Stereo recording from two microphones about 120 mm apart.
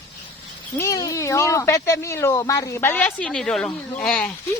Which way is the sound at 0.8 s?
30° left (ahead or behind).